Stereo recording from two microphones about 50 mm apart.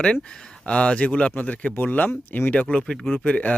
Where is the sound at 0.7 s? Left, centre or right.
Left.